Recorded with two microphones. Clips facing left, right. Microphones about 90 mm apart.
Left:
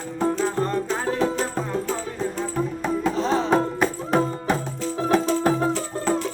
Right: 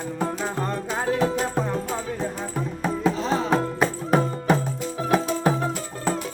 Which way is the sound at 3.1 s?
40° left (ahead or behind).